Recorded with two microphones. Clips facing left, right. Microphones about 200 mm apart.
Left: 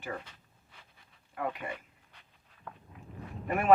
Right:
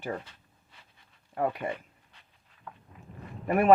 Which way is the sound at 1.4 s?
40° right (ahead or behind).